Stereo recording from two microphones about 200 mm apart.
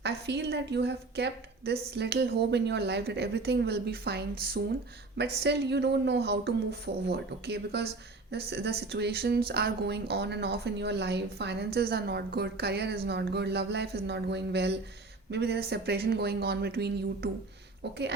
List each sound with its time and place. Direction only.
0.0 s a woman's voice: 55° right (ahead or behind)